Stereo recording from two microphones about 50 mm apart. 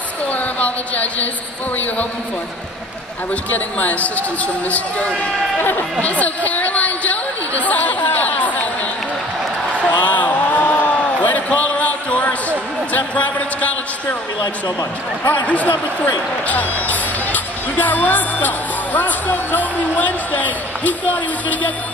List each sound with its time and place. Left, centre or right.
0.3 s a sound: left
3.4 s speech: left
5.6 s speech: left
5.9 s chatter: left
9.9 s a sound: left
15.4 s speech: left
16.4 s music: left
18.9 s speech: left